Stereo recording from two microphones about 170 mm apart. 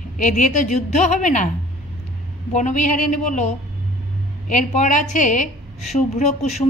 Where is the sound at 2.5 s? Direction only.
45° left (ahead or behind).